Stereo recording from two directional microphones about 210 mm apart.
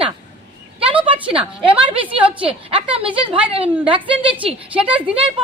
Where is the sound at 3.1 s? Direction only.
25° right (ahead or behind).